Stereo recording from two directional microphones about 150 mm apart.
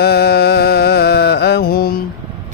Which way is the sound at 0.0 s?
90° left.